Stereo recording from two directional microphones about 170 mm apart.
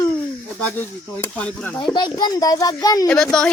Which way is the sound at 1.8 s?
25° left (ahead or behind).